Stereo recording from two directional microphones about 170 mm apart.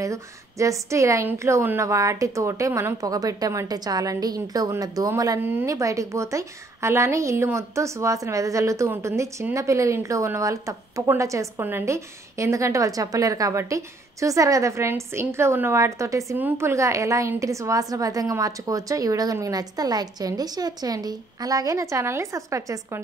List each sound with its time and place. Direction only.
0.0 s a woman's voice: 20° right (ahead or behind)